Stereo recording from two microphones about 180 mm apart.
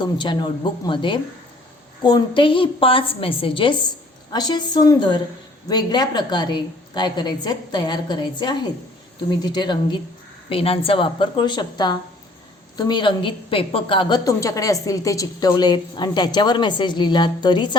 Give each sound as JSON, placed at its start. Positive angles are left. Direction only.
{"t": 0.0, "sound": "a woman's voice", "side_deg": 25}